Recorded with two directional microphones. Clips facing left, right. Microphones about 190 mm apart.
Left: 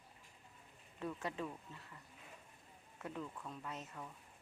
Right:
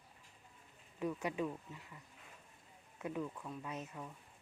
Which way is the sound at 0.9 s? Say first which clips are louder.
Right 5 dB; 10° right (ahead or behind).